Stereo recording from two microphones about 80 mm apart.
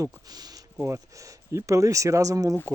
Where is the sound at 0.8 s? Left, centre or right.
Right.